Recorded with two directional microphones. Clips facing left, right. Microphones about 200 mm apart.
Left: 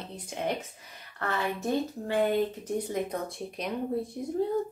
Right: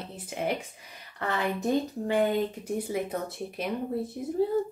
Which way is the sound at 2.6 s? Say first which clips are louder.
Even; 5° right (ahead or behind).